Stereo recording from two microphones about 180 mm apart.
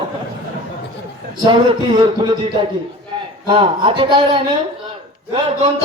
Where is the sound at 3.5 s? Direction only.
25° right (ahead or behind).